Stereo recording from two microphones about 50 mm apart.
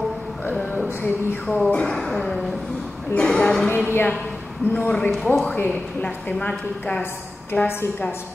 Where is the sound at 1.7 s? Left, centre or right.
Left.